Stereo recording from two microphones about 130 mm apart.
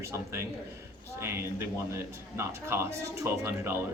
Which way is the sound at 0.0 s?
20° right (ahead or behind).